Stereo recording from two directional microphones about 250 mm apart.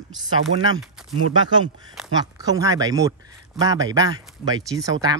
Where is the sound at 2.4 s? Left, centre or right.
Centre.